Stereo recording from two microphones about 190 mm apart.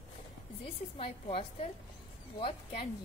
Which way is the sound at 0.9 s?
30° left (ahead or behind).